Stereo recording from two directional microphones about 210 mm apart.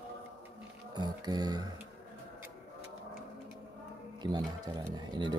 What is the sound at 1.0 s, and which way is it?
Speech, 20° right (ahead or behind).